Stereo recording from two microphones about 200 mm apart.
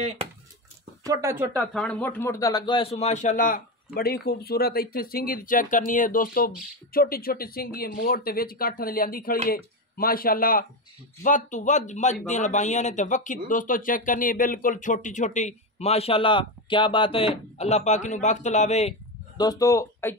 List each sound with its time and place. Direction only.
1.0 s speech: 15° right (ahead or behind)
1.7 s speech: 5° left (ahead or behind); by 18.9 s 35° left (ahead or behind)
19.3 s speech: 20° left (ahead or behind)